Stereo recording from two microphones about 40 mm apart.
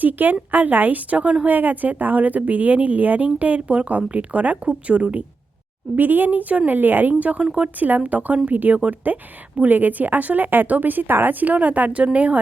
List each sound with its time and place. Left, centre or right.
0.0 s a woman's voice: right
1.5 s a woman's voice: right
6.0 s a woman's voice: right
6.7 s a woman's voice: right
11.3 s a woman's voice: right